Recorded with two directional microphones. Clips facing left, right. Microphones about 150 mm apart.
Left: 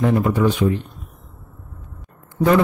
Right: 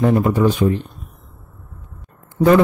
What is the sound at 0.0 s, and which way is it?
Speech, 30° right (ahead or behind).